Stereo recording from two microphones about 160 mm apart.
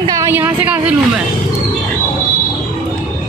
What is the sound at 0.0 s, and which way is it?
Speech, 15° right (ahead or behind).